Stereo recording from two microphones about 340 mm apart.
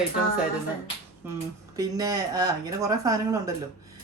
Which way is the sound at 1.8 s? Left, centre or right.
Centre.